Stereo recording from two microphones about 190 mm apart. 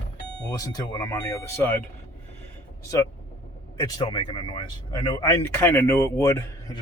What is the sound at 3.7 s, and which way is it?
Speech, 20° left (ahead or behind).